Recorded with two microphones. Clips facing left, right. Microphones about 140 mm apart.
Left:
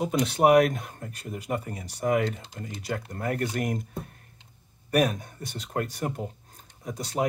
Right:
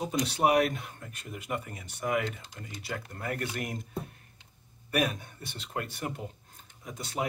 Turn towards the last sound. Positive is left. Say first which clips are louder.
# left 6 dB
turn(degrees=40)  # may be behind; listen again after turning